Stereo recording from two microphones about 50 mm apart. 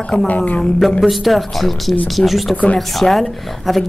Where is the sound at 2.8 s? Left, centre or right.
Centre.